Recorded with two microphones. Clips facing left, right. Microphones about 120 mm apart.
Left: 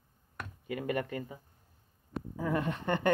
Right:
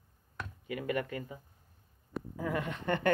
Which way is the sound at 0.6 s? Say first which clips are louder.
Left 1 dB; 35° left (ahead or behind).